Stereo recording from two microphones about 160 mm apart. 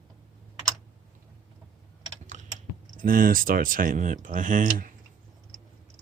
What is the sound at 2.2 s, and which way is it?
Typing, 50° right (ahead or behind).